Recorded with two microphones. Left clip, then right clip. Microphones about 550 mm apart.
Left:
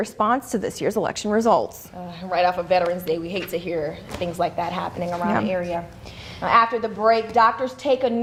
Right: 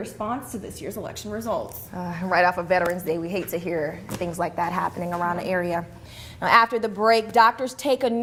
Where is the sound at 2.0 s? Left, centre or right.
Right.